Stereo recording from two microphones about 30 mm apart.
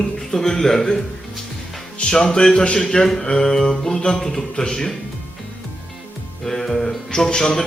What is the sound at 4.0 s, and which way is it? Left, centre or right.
Speech, left.